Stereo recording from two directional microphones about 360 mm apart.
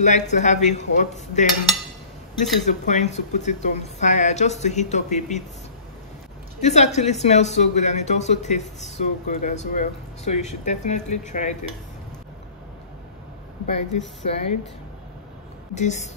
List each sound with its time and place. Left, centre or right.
0.0 s speech: centre
2.6 s speech: centre
6.6 s speech: centre
13.7 s speech: centre
15.7 s speech: centre